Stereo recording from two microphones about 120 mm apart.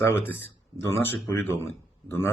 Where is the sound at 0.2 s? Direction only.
20° left (ahead or behind).